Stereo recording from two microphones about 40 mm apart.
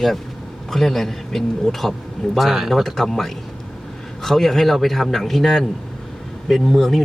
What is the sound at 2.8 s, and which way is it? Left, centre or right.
A man's voice, centre.